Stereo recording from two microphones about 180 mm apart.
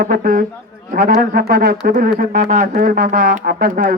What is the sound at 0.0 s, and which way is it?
Speech, 55° right (ahead or behind).